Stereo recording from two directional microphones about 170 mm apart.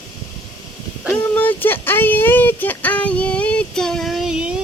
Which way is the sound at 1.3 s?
10° left (ahead or behind).